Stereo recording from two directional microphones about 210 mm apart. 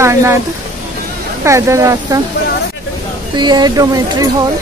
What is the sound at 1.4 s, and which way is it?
Speech, 15° right (ahead or behind).